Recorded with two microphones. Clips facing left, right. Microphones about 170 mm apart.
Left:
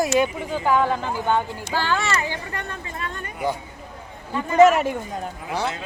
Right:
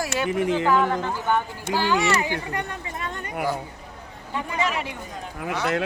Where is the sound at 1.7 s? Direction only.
15° right (ahead or behind).